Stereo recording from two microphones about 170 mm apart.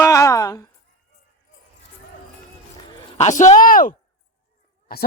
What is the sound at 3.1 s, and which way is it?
A woman's voice, 45° left (ahead or behind).